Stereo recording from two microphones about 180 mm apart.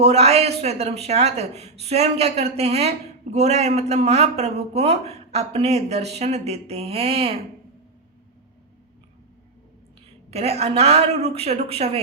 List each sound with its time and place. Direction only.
0.0 s a man's voice: 35° right (ahead or behind)
10.3 s a man's voice: 35° right (ahead or behind)